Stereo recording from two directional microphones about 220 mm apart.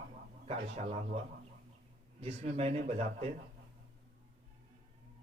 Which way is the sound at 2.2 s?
30° right (ahead or behind).